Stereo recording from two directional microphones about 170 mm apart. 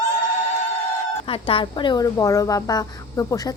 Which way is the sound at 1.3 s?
30° left (ahead or behind).